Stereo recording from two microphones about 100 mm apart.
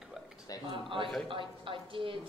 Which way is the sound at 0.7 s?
60° right (ahead or behind).